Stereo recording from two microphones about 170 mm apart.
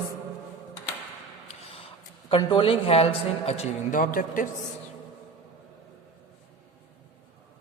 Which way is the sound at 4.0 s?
55° left (ahead or behind).